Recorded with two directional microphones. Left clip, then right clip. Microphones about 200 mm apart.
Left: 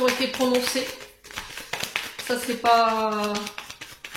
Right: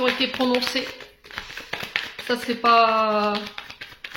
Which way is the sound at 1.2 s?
25° right (ahead or behind).